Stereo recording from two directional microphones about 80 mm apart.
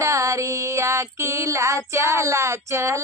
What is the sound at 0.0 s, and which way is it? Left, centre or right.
Child singing, right.